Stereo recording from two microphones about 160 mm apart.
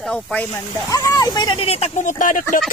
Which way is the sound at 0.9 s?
25° left (ahead or behind).